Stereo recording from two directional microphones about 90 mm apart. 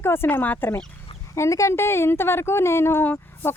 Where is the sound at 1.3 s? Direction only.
35° left (ahead or behind).